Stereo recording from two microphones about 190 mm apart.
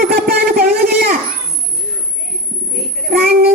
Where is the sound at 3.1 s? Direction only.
50° right (ahead or behind).